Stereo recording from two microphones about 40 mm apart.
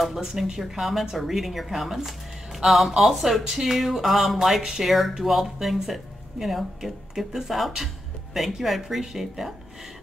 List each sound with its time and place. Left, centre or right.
0.1 s speech: centre